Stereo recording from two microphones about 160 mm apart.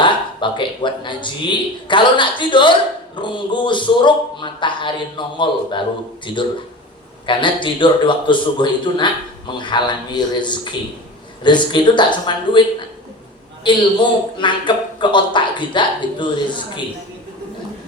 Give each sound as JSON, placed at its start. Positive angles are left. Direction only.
{"t": 0.0, "sound": "a man's voice", "side_deg": 30}
{"t": 7.3, "sound": "a man's voice", "side_deg": 30}
{"t": 13.7, "sound": "a man's voice", "side_deg": 30}